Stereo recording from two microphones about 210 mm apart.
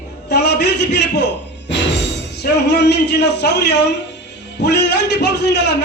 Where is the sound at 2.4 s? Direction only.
50° left (ahead or behind).